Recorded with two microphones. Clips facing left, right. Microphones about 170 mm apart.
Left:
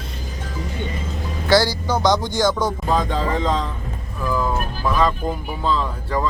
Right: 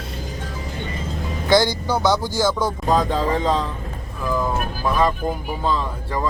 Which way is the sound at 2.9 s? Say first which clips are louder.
Right 3 dB; 40° right (ahead or behind).